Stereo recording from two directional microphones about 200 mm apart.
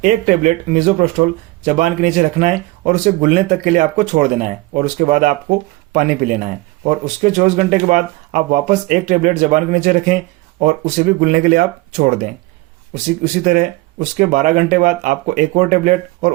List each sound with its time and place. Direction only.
0.0 s speech: 40° right (ahead or behind)